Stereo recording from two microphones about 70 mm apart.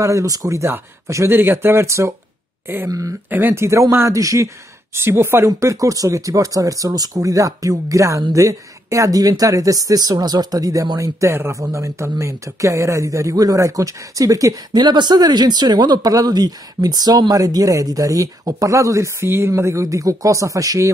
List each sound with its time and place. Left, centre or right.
0.0 s speech: right
3.3 s speech: right
3.5 s speech: right
4.9 s speech: right
5.6 s speech: right
14.7 s speech: right
19.2 s speech: right